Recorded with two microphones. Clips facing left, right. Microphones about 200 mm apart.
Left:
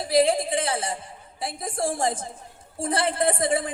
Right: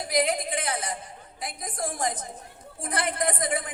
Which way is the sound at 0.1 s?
30° left (ahead or behind).